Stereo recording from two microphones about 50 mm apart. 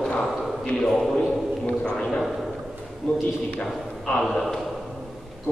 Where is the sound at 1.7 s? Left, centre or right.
Centre.